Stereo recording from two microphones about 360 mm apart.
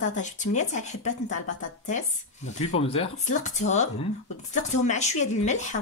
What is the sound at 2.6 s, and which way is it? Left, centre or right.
Speech, centre.